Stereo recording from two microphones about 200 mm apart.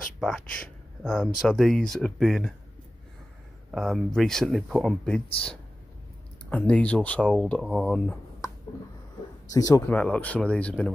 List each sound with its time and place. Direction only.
0.2 s speech: centre (ahead or behind)
3.7 s speech: centre (ahead or behind)
6.5 s speech: 5° left (ahead or behind)
9.5 s speech: 15° left (ahead or behind)